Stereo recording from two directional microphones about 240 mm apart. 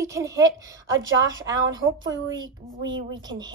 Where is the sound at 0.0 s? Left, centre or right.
Centre.